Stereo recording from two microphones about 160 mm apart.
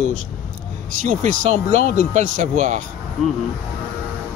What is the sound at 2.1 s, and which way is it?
Speech, 50° right (ahead or behind).